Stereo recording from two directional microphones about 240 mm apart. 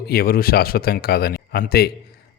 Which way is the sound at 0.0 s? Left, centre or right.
Left.